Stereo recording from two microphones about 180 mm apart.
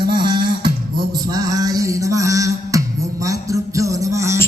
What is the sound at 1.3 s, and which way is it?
Music, 20° right (ahead or behind).